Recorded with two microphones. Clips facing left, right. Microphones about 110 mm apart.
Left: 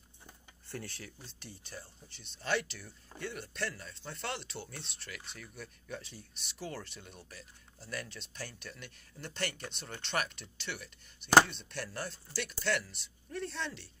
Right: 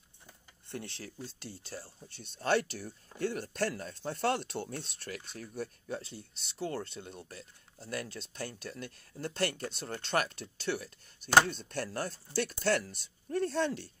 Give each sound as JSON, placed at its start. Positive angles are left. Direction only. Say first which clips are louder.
{"t": 0.7, "sound": "speech", "louder": "right 2 dB", "side_deg": -25}
{"t": 2.3, "sound": "speech", "louder": "right 5 dB", "side_deg": -45}